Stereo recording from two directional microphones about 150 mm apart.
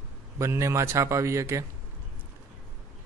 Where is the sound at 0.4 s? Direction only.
20° right (ahead or behind).